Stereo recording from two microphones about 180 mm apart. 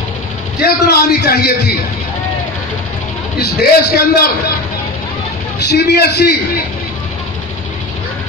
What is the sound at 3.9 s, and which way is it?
Speech, 60° left (ahead or behind).